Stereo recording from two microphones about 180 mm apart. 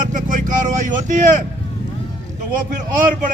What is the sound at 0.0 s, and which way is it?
Vehicle, 45° right (ahead or behind).